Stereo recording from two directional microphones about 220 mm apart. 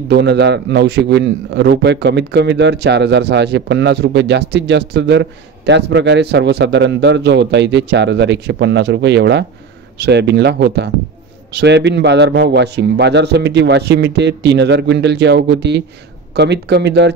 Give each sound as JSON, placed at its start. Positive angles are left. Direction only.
{"t": 0.1, "sound": "a man's voice", "side_deg": -50}